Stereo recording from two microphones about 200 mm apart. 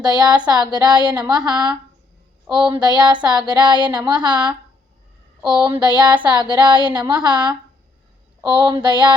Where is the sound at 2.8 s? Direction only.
20° right (ahead or behind).